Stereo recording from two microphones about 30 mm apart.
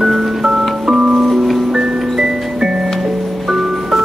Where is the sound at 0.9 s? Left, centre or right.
Right.